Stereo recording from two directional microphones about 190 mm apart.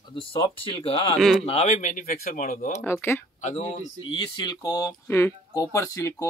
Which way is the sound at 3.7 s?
25° left (ahead or behind).